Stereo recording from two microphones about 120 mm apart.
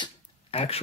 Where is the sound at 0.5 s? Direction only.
55° left (ahead or behind).